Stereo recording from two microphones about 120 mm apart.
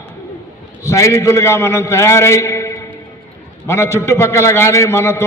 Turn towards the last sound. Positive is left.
turn(degrees=20)  # may be behind; listen again after turning